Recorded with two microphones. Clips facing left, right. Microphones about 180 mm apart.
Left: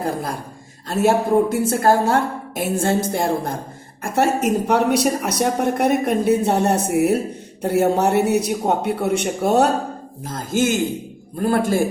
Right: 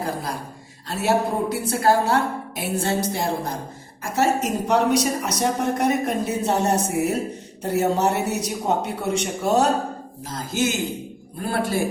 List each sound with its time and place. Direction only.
0.0 s a woman's voice: 50° left (ahead or behind)